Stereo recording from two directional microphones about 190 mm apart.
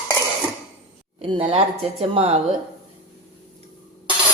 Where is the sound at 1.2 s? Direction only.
25° right (ahead or behind).